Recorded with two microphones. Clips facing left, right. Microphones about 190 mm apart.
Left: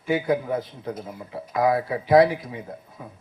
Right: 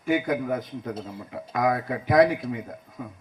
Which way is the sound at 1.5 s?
30° left (ahead or behind).